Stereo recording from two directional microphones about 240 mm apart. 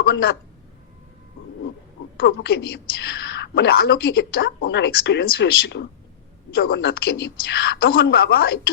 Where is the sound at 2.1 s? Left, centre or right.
Left.